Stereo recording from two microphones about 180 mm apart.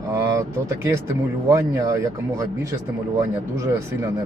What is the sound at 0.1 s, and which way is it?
Speech, 15° right (ahead or behind).